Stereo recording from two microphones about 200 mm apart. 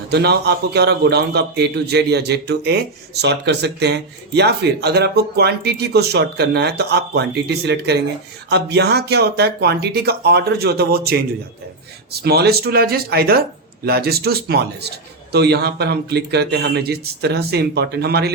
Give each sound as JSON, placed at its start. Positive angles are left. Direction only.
{"t": 0.1, "sound": "a man's voice", "side_deg": -55}